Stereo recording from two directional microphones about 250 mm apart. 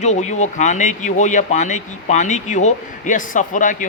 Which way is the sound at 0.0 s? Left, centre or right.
Left.